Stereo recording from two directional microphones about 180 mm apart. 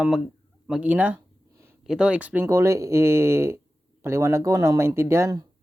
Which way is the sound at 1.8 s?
5° right (ahead or behind).